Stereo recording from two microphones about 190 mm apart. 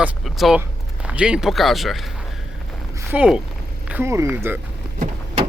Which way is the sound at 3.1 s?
5° right (ahead or behind).